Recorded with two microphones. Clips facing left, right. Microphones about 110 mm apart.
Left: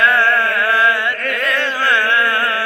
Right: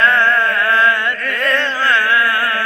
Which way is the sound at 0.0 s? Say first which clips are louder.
Even; 15° left (ahead or behind).